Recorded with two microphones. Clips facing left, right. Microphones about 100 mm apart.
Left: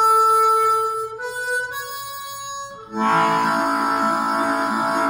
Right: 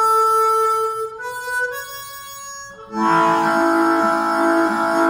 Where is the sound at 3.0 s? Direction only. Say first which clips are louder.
Right 2 dB; 15° right (ahead or behind).